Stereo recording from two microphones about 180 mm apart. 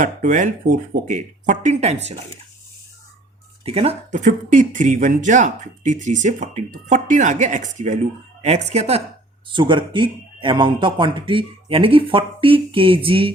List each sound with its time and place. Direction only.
0.0 s speech: 50° right (ahead or behind)
3.6 s a woman's voice: 35° right (ahead or behind)
9.5 s speech: 25° right (ahead or behind)